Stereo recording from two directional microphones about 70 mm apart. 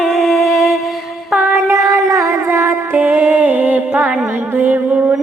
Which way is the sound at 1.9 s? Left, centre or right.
Right.